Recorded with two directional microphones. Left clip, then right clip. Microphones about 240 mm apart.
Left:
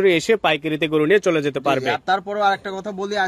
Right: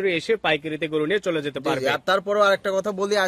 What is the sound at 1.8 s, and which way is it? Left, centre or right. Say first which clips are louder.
Speech: left 1 dB; right.